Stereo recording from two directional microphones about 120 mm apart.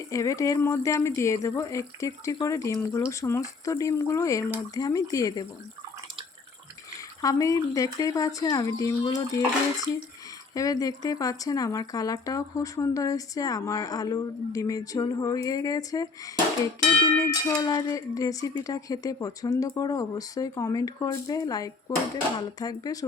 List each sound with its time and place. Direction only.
0.1 s speech: 25° left (ahead or behind)
7.2 s speech: 30° left (ahead or behind)
10.5 s speech: 30° left (ahead or behind)